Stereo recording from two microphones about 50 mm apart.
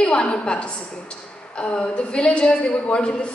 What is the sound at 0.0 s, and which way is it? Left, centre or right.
A woman's voice, centre.